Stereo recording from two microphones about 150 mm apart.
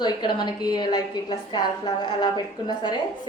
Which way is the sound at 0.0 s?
30° left (ahead or behind).